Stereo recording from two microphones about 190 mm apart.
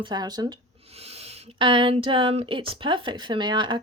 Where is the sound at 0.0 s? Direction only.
20° right (ahead or behind).